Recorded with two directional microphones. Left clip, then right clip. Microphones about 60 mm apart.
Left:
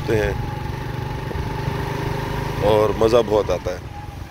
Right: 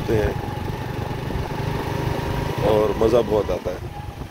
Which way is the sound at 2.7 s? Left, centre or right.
Centre.